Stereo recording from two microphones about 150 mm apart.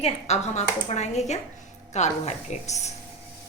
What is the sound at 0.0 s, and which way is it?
A woman's voice, 45° left (ahead or behind).